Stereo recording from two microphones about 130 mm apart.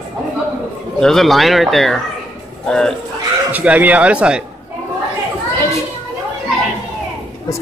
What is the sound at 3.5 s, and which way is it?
Speech, 10° right (ahead or behind).